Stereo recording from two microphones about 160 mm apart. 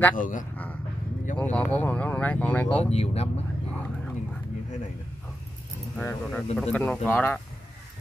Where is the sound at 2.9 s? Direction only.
40° left (ahead or behind).